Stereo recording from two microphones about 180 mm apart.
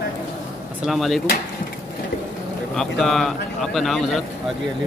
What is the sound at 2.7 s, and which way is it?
A man's voice, centre (ahead or behind).